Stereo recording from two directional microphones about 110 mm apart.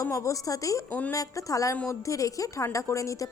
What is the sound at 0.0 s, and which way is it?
Speech, 30° left (ahead or behind).